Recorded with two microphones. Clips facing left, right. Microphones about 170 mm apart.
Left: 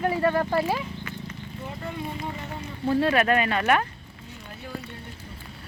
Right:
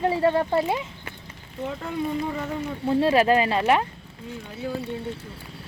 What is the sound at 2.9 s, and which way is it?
Speech, 25° right (ahead or behind).